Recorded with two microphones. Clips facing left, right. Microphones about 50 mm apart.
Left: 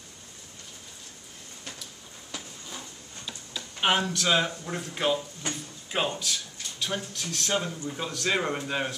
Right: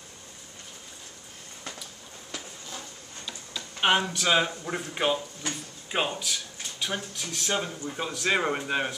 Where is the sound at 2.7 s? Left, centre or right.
Centre.